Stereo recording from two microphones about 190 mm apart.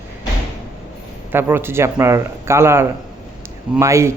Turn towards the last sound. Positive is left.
turn(degrees=-15)  # may be behind; listen again after turning